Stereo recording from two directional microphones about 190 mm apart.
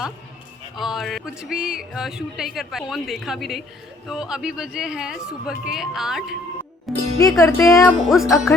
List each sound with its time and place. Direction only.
0.8 s speech: centre (ahead or behind)
7.2 s music: 15° left (ahead or behind)
7.6 s speech: centre (ahead or behind)